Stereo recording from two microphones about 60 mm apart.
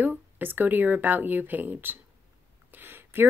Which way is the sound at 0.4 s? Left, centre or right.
Right.